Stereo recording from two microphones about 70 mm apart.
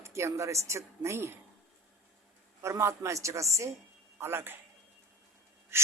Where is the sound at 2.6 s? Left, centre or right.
Right.